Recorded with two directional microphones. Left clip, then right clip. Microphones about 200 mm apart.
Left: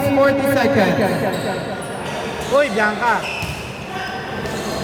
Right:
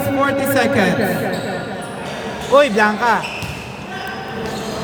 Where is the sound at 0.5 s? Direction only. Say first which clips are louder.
Even; 50° right (ahead or behind).